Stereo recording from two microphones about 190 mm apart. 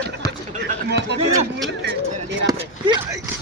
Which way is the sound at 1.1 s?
65° right (ahead or behind).